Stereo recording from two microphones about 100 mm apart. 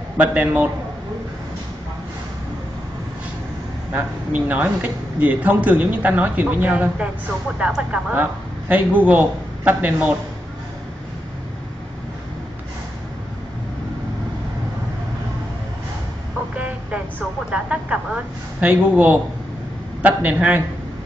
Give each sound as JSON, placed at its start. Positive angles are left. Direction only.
{"t": 0.2, "sound": "a man's voice", "side_deg": -15}
{"t": 3.9, "sound": "a man's voice", "side_deg": -15}
{"t": 16.5, "sound": "vehicle", "side_deg": -15}
{"t": 17.5, "sound": "a man's voice", "side_deg": -10}